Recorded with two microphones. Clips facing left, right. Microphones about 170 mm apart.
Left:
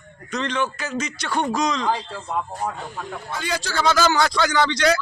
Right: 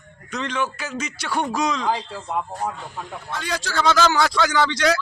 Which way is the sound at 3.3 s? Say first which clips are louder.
Even; centre (ahead or behind).